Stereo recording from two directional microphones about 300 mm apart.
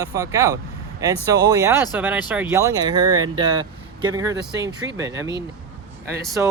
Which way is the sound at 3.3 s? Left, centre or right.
Centre.